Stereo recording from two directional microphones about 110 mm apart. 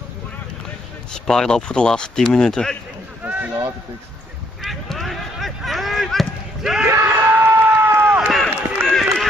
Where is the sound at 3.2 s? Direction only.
15° right (ahead or behind).